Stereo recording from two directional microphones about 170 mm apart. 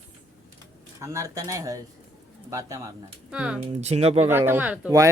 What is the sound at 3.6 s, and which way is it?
Speech, 40° right (ahead or behind).